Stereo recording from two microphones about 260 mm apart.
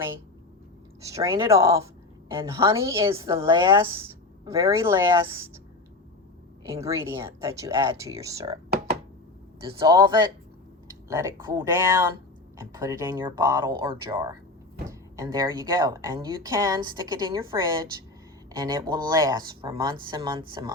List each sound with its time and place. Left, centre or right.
1.0 s speech: centre
6.7 s speech: centre
9.6 s speech: centre